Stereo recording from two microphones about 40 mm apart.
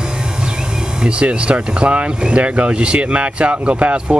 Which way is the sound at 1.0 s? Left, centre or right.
Right.